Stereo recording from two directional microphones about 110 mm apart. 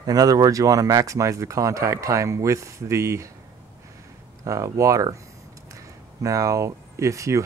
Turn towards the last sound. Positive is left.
turn(degrees=-30)  # may be behind; listen again after turning